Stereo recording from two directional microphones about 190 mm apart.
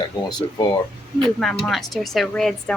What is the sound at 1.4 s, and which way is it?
A woman's voice, centre (ahead or behind).